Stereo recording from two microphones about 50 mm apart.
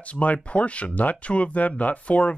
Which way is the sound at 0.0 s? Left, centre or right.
Left.